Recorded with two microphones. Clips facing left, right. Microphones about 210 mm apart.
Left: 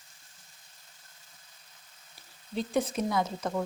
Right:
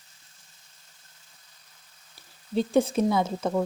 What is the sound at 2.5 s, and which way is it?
Speech, 30° right (ahead or behind).